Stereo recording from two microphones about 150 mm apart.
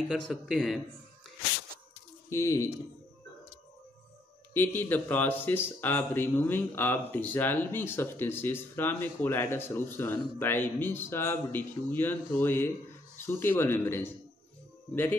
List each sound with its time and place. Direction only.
0.1 s a man's voice: centre (ahead or behind)
2.2 s speech: 20° left (ahead or behind)
4.6 s speech: 15° left (ahead or behind)